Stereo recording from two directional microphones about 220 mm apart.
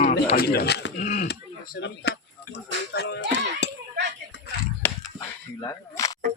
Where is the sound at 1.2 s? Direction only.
45° left (ahead or behind).